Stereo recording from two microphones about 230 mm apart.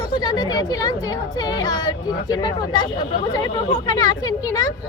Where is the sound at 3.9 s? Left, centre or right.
Centre.